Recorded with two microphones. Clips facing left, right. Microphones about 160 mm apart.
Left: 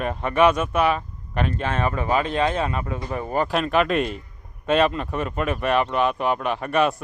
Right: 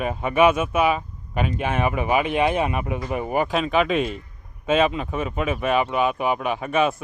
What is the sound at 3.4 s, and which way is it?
Speech, centre (ahead or behind).